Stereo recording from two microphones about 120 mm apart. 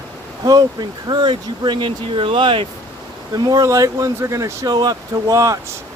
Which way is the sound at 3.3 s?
30° right (ahead or behind).